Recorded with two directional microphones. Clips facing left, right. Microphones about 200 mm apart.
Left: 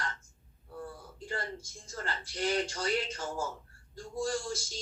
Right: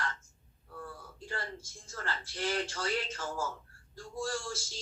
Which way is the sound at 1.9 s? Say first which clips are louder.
Left 1 dB; 15° left (ahead or behind).